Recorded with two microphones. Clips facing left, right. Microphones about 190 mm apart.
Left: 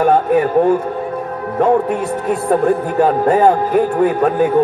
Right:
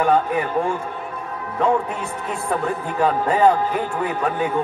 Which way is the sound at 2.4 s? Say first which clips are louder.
Left 9 dB; 50° left (ahead or behind).